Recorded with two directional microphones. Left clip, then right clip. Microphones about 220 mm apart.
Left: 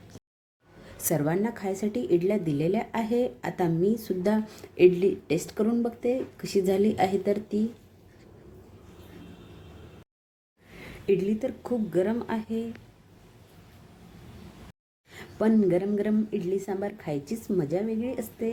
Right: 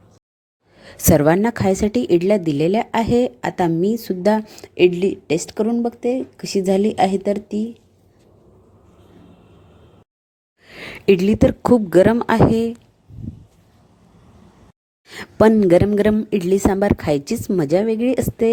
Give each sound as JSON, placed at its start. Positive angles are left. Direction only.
{"t": 0.9, "sound": "a woman's voice", "side_deg": -40}
{"t": 10.7, "sound": "speech", "side_deg": -45}
{"t": 15.1, "sound": "a woman's voice", "side_deg": -45}